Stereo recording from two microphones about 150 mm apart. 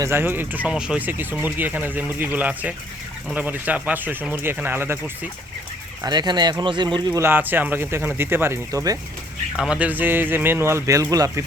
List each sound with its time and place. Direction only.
0.0 s speech: 15° right (ahead or behind)
6.0 s speech: 30° right (ahead or behind)
7.2 s speech: 15° right (ahead or behind)
9.6 s speech: 5° right (ahead or behind)